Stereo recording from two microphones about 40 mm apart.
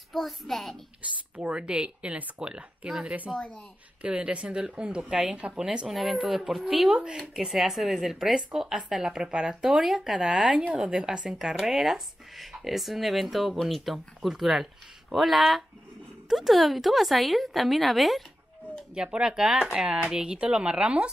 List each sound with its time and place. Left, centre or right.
0.1 s speech: centre
1.3 s speech: right
3.3 s speech: centre
4.0 s speech: right
5.9 s speech: centre
10.8 s speech: right
11.2 s speech: centre
13.9 s speech: centre
18.9 s speech: right